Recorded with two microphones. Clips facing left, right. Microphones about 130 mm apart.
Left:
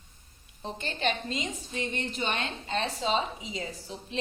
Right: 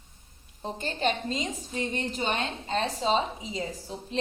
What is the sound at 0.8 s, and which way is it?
A woman's voice, 40° right (ahead or behind).